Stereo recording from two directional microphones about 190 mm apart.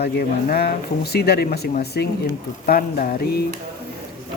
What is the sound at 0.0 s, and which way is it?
Speech, 55° left (ahead or behind).